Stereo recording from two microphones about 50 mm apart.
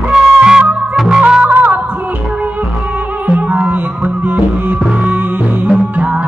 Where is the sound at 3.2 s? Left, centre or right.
Right.